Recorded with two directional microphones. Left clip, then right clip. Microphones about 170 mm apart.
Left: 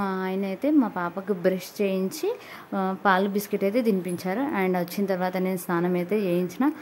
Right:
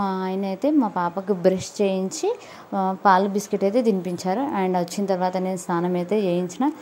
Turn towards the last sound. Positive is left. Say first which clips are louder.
# right 2 dB
turn(degrees=-5)  # may be behind; listen again after turning